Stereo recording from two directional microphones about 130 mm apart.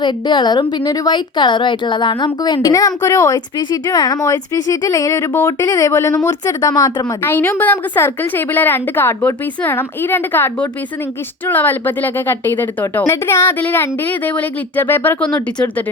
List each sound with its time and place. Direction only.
0.0 s a woman's voice: 35° left (ahead or behind)
7.2 s a woman's voice: 15° left (ahead or behind)